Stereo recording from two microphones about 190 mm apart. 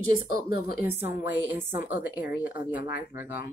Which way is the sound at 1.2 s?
10° right (ahead or behind).